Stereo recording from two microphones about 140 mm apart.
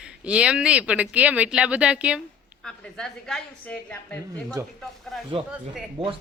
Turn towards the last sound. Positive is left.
turn(degrees=-40)  # may be behind; listen again after turning